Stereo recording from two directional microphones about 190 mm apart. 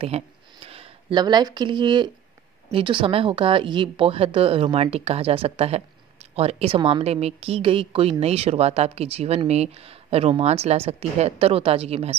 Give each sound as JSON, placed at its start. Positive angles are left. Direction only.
{"t": 0.7, "sound": "a woman's voice", "side_deg": -25}